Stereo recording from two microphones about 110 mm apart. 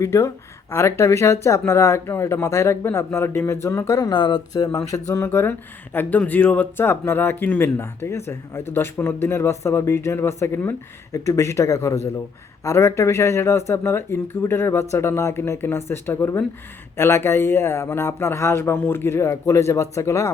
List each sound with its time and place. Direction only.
0.0 s speech: 25° left (ahead or behind)